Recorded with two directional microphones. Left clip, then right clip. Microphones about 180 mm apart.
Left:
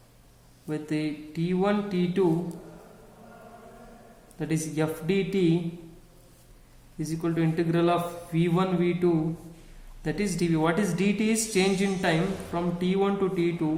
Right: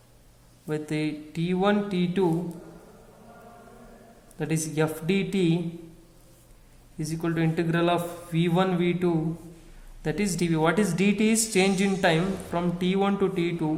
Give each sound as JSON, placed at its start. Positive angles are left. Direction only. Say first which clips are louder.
{"t": 0.7, "sound": "a woman's voice", "louder": "right 1 dB", "side_deg": -35}
{"t": 4.4, "sound": "a man's voice", "louder": "right 2 dB", "side_deg": -40}
{"t": 7.0, "sound": "a woman's voice", "louder": "even", "side_deg": -40}